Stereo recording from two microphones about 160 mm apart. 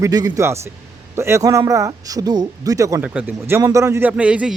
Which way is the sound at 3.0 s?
10° right (ahead or behind).